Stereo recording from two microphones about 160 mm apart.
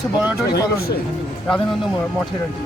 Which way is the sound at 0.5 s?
80° left.